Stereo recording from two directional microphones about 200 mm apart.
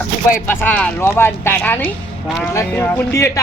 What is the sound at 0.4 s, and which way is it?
Speech, 10° left (ahead or behind).